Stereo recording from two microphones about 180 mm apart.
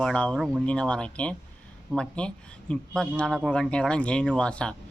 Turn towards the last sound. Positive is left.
turn(degrees=5)  # may be behind; listen again after turning